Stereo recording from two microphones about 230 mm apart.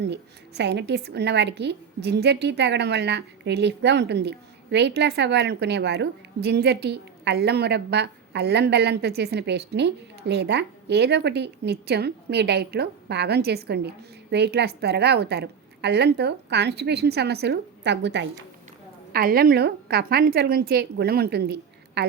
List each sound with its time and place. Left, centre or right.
0.0 s a woman's voice: right